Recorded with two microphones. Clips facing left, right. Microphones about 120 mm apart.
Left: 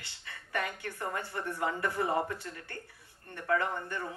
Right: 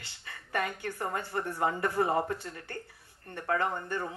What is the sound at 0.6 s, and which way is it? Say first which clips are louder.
Speech: right 3 dB; 25° right (ahead or behind).